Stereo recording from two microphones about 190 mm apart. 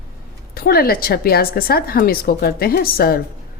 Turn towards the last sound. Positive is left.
turn(degrees=50)  # may be behind; listen again after turning